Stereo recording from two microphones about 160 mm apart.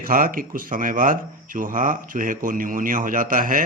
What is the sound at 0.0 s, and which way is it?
A man's voice, 60° right (ahead or behind).